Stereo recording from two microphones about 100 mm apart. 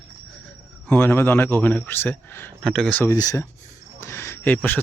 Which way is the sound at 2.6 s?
5° left (ahead or behind).